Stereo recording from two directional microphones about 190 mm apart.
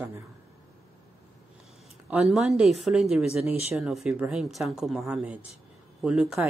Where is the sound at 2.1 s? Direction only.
Centre (ahead or behind).